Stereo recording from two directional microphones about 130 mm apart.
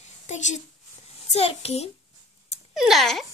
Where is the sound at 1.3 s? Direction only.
50° left (ahead or behind).